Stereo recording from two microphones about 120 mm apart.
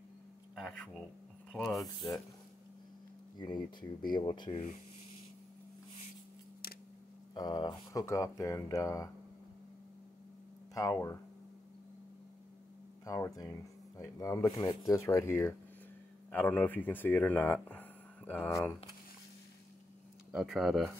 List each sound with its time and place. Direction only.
0.6 s speech: 5° left (ahead or behind)
3.3 s speech: 35° left (ahead or behind)
7.3 s speech: 35° left (ahead or behind)
8.0 s speech: 25° left (ahead or behind)
10.7 s speech: 25° left (ahead or behind)
13.0 s speech: 30° left (ahead or behind)
20.3 s speech: 5° right (ahead or behind)